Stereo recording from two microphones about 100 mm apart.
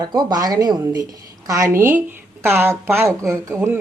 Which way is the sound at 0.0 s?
45° right (ahead or behind).